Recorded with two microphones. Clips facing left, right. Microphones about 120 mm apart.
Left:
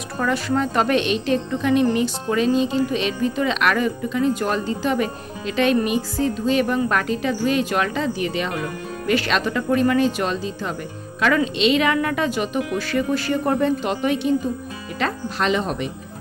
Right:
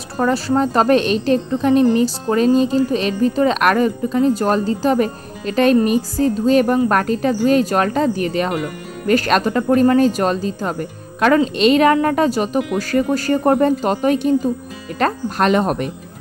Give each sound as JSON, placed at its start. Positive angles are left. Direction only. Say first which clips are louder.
{"t": 0.2, "sound": "speech", "louder": "right 5 dB", "side_deg": -35}